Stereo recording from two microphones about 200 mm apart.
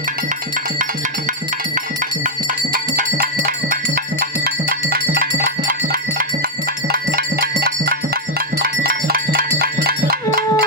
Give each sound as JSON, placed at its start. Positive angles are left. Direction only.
{"t": 2.7, "sound": "music", "side_deg": -45}